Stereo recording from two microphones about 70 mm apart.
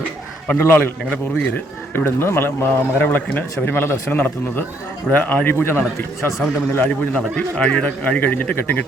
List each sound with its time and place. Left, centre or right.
0.6 s a man's voice: left